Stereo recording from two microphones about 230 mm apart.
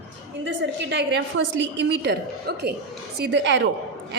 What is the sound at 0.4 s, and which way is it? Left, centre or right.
A woman's voice, right.